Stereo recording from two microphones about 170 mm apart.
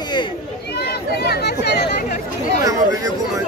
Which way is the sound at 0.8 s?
70° left (ahead or behind).